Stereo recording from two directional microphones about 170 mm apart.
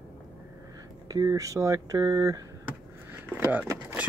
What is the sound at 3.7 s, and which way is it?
Speech, 15° right (ahead or behind).